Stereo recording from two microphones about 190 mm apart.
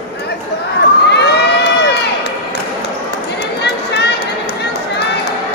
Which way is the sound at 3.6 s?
60° left (ahead or behind).